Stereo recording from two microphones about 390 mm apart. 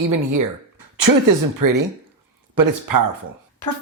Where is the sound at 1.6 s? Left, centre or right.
Right.